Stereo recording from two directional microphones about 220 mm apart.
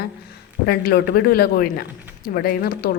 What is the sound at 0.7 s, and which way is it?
Speech, 45° left (ahead or behind).